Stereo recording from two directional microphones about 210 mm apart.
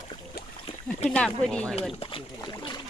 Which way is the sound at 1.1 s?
5° left (ahead or behind).